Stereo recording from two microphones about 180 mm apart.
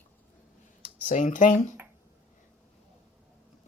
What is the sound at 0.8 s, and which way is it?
Speech, 45° left (ahead or behind).